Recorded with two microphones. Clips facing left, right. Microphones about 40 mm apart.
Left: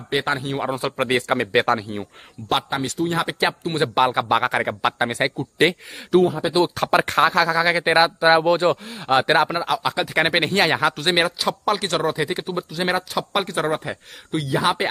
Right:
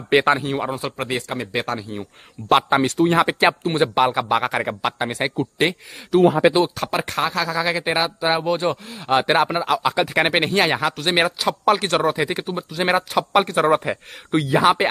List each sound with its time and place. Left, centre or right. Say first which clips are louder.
0.4 s speech: right 2 dB; centre
0.7 s speech: left 2 dB; centre
0.9 s speech: left 5 dB; left
2.7 s speech: right 6 dB; right
3.2 s speech: right 5 dB; right; by 12.8 s centre
12.8 s speech: right 4 dB; centre